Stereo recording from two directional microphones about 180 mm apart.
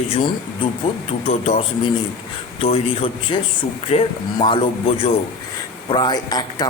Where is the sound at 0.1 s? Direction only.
30° left (ahead or behind).